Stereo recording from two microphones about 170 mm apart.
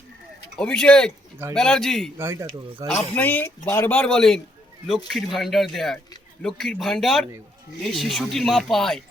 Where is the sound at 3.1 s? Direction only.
10° left (ahead or behind).